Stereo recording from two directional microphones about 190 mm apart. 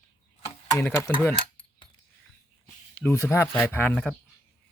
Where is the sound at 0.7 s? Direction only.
15° left (ahead or behind).